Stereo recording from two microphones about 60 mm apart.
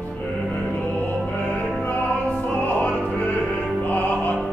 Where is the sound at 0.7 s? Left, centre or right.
Left.